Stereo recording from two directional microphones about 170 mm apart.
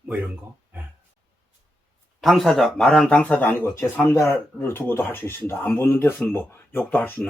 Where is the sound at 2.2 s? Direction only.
Centre (ahead or behind).